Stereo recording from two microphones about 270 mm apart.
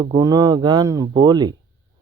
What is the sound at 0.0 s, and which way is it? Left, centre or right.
Speech, centre.